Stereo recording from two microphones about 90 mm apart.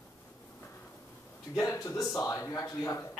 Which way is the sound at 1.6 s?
40° left (ahead or behind).